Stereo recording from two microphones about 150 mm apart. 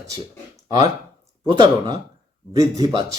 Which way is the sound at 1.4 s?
30° right (ahead or behind).